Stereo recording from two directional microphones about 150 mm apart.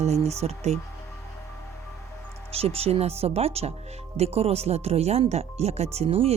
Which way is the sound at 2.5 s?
40° right (ahead or behind).